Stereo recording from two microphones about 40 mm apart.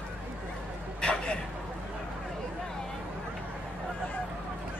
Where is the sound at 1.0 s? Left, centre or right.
Left.